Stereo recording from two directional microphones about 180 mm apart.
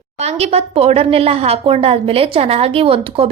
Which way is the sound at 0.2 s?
35° right (ahead or behind).